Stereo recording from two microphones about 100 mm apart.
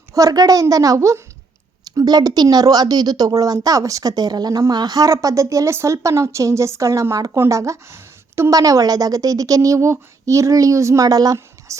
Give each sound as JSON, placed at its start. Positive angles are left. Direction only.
{"t": 0.1, "sound": "a woman's voice", "side_deg": -35}
{"t": 2.0, "sound": "a woman's voice", "side_deg": -40}